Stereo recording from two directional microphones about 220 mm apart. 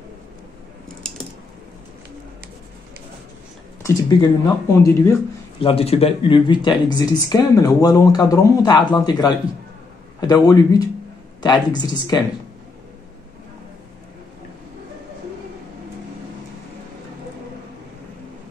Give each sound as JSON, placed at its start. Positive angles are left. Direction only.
{"t": 3.8, "sound": "speech", "side_deg": 15}
{"t": 5.6, "sound": "speech", "side_deg": 25}